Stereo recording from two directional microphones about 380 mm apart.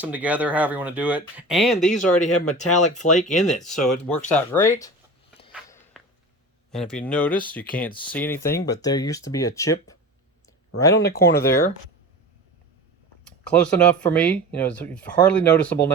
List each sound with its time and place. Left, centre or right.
0.0 s speech: centre
2.3 s speech: left
2.9 s speech: centre
3.4 s speech: centre
5.6 s walk: centre
6.7 s speech: centre
11.3 s speech: left
13.5 s speech: centre